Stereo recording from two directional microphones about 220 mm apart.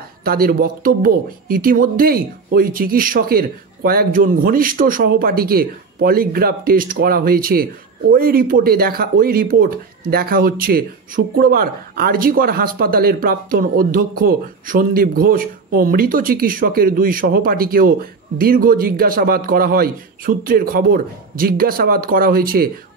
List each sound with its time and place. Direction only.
0.2 s speech: 45° right (ahead or behind)